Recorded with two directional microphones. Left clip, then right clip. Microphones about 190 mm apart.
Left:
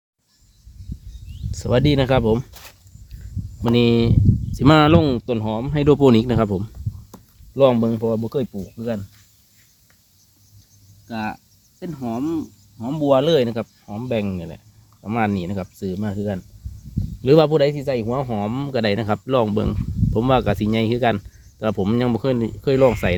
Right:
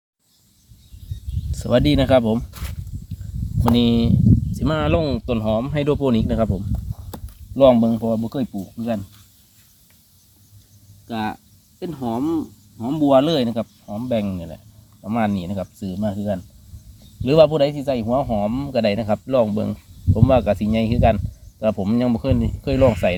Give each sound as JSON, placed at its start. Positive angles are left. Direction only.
{"t": 1.5, "sound": "speech", "side_deg": 20}
{"t": 3.8, "sound": "a man's voice", "side_deg": 40}
{"t": 5.2, "sound": "speech", "side_deg": 30}
{"t": 6.0, "sound": "a man's voice", "side_deg": 50}
{"t": 7.5, "sound": "speech", "side_deg": 35}
{"t": 11.1, "sound": "cricket", "side_deg": 15}
{"t": 12.8, "sound": "a man's voice", "side_deg": 20}